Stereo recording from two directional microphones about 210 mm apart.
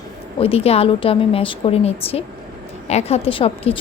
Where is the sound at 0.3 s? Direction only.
25° left (ahead or behind).